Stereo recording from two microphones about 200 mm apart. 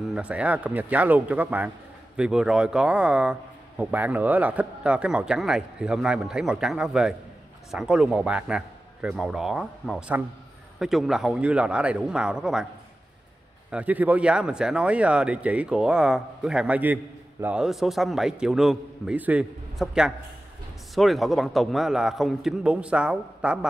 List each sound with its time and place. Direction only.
0.1 s a man's voice: 5° right (ahead or behind)
13.7 s speech: 5° right (ahead or behind)